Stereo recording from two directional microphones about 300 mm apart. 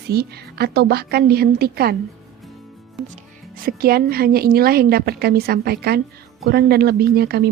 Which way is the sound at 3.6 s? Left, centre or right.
Right.